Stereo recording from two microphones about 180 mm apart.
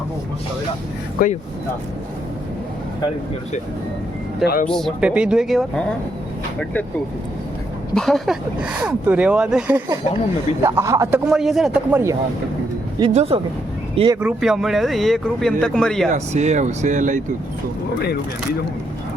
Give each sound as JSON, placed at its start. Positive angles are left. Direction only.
{"t": 1.2, "sound": "speech", "side_deg": 55}
{"t": 4.4, "sound": "speech", "side_deg": 50}
{"t": 4.7, "sound": "speech", "side_deg": 0}
{"t": 7.9, "sound": "a man's voice", "side_deg": 0}
{"t": 11.3, "sound": "speech", "side_deg": 0}
{"t": 13.1, "sound": "speech", "side_deg": -35}
{"t": 14.2, "sound": "speech", "side_deg": -5}
{"t": 16.0, "sound": "speech", "side_deg": -40}